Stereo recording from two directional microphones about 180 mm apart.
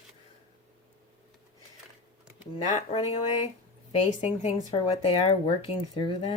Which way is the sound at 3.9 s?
35° left (ahead or behind).